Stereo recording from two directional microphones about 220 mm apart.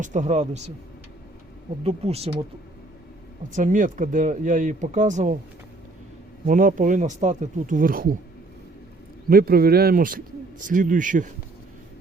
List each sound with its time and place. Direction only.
0.0 s a man's voice: 35° right (ahead or behind)
1.8 s speech: 25° right (ahead or behind)
3.5 s a man's voice: 35° right (ahead or behind)
6.4 s a man's voice: 40° right (ahead or behind)
9.3 s a man's voice: 45° right (ahead or behind)